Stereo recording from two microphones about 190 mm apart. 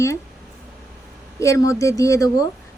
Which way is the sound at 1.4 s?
15° left (ahead or behind).